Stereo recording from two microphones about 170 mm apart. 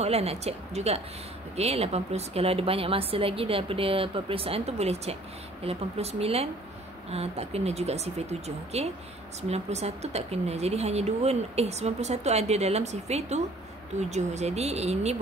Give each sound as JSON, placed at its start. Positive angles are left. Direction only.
{"t": 0.0, "sound": "speech", "side_deg": -35}